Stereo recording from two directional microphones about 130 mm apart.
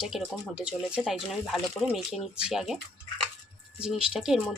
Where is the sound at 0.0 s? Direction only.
5° right (ahead or behind).